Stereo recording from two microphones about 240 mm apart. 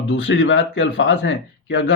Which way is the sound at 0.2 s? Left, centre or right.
Left.